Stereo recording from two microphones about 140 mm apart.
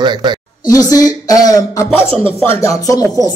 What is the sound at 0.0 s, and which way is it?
Speech, 30° right (ahead or behind).